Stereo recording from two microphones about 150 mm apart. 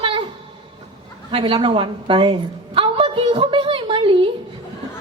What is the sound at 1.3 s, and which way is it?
A woman's voice, 35° right (ahead or behind).